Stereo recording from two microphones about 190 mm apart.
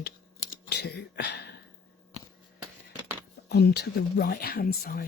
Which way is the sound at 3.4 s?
60° left (ahead or behind).